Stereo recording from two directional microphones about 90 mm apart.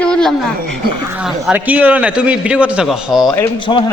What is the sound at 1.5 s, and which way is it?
A man's voice, 20° right (ahead or behind).